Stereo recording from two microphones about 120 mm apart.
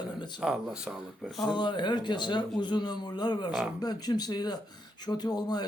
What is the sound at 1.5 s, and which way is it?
A man's voice, 40° left (ahead or behind).